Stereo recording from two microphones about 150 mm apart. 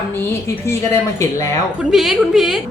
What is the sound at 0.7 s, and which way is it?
Speech, 20° left (ahead or behind).